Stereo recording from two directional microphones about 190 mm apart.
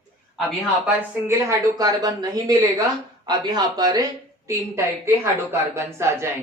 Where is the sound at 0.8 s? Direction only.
15° right (ahead or behind).